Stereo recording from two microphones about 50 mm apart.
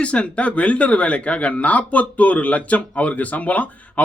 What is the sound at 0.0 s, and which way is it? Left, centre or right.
Speech, left.